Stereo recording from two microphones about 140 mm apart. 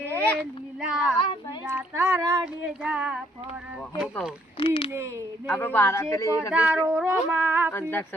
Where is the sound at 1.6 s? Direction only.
20° right (ahead or behind).